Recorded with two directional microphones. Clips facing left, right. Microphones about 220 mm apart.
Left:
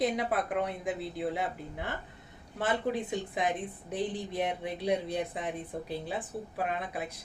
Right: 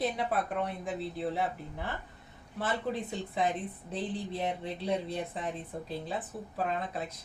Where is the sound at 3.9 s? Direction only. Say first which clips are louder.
Left 2 dB; 15° left (ahead or behind).